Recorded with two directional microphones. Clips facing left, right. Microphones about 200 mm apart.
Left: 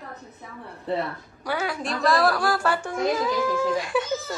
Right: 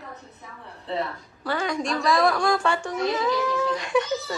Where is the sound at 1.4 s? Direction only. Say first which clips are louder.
Right 1 dB; 10° left (ahead or behind).